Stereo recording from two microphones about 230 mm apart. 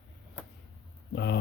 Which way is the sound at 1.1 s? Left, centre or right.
Left.